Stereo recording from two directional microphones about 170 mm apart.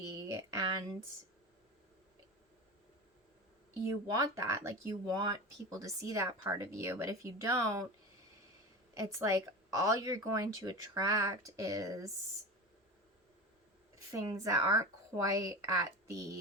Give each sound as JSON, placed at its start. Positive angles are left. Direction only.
{"t": 0.0, "sound": "a sound", "side_deg": -20}
{"t": 4.1, "sound": "a woman's voice", "side_deg": -20}
{"t": 9.0, "sound": "a woman's voice", "side_deg": -20}
{"t": 14.1, "sound": "a woman's voice", "side_deg": -20}